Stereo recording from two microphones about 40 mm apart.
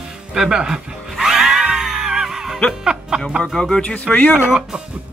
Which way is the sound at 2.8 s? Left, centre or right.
Centre.